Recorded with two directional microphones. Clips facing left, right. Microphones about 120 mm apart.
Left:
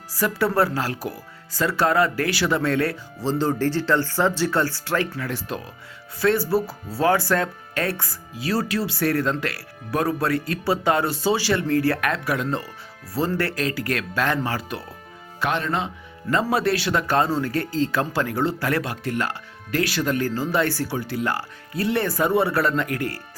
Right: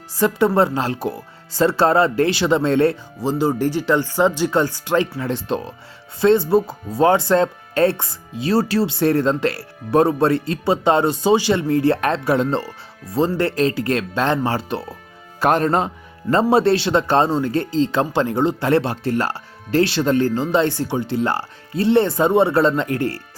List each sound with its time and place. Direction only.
0.2 s speech: 25° right (ahead or behind)
3.2 s speech: 15° right (ahead or behind)
15.4 s speech: 40° right (ahead or behind)
16.3 s speech: 30° right (ahead or behind)